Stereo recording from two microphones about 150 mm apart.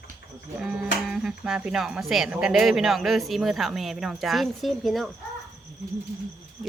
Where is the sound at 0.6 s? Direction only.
5° right (ahead or behind).